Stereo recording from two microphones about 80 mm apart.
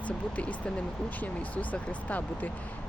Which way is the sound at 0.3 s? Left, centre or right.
Centre.